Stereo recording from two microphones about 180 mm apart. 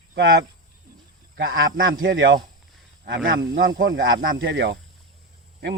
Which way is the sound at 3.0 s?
85° right.